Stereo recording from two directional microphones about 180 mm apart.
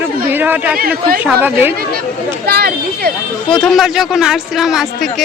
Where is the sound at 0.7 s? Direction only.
55° right (ahead or behind).